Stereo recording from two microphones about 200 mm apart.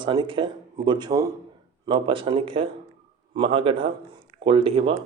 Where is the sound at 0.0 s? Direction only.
25° right (ahead or behind).